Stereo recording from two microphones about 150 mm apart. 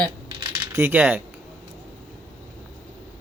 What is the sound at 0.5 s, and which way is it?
Speech, 15° right (ahead or behind).